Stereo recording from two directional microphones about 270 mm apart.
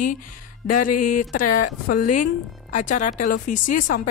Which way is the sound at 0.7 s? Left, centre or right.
Left.